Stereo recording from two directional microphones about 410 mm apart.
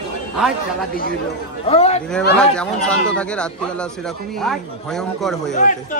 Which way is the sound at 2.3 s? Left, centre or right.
Centre.